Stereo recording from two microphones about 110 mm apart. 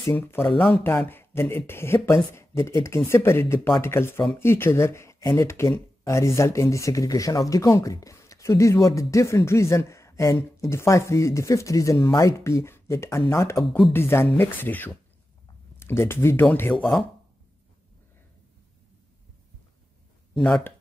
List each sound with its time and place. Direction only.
0.6 s speech: 5° left (ahead or behind)
1.0 s speech: 20° left (ahead or behind)
13.6 s speech: centre (ahead or behind)
13.9 s speech: 20° left (ahead or behind)
16.7 s speech: centre (ahead or behind)
20.3 s speech: 5° left (ahead or behind)